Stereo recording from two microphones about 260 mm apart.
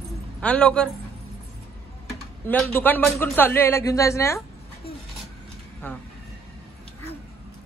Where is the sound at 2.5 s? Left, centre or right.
Centre.